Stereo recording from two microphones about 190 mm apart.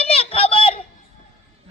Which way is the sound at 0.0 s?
30° left (ahead or behind).